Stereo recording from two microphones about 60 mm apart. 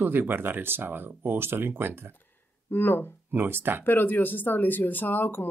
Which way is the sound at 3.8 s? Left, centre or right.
Left.